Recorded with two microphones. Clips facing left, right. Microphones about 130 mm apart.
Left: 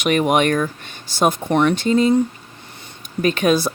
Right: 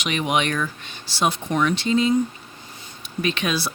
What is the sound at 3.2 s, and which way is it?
Speech, 45° left (ahead or behind).